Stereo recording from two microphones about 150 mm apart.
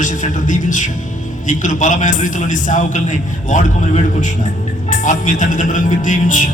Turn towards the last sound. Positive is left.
turn(degrees=60)  # may be behind; listen again after turning